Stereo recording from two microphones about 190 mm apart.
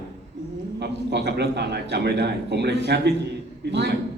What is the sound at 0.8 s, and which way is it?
A man's voice, 60° right (ahead or behind).